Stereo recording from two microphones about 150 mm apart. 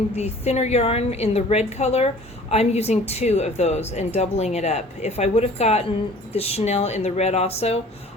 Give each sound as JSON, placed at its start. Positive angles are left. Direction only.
{"t": 0.2, "sound": "a woman's voice", "side_deg": 45}